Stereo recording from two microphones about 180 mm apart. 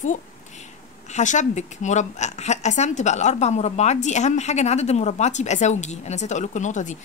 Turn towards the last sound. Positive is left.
turn(degrees=40)  # may be behind; listen again after turning